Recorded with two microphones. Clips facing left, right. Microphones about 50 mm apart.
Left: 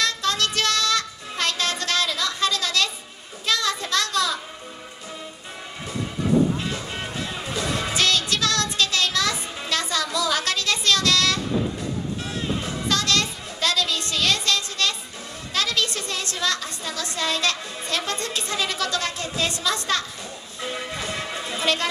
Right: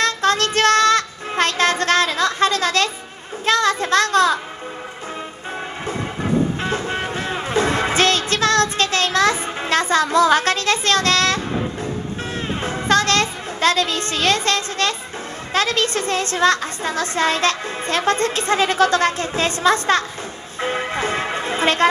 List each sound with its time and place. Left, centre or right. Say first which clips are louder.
0.0 s child singing: right 6 dB; right
3.4 s a sound: right 7 dB; right
6.6 s music: right 7 dB; right
12.6 s music: right 10 dB; right
15.5 s a woman's voice: right 6 dB; right
20.6 s music: right 8 dB; right